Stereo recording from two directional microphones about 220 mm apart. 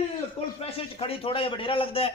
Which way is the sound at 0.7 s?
25° left (ahead or behind).